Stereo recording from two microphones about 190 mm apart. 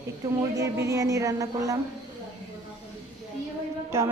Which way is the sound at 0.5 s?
15° right (ahead or behind).